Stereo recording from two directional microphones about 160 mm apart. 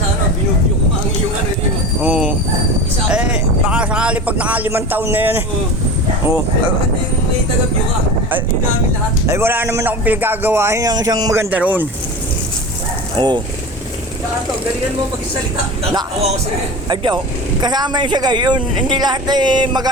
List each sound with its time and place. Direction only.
2.0 s train: 5° right (ahead or behind)
3.1 s speech: 5° right (ahead or behind)
9.2 s speech: 15° right (ahead or behind)
11.5 s speech: 10° right (ahead or behind)
13.1 s speech: 30° right (ahead or behind)
16.9 s speech: 30° right (ahead or behind)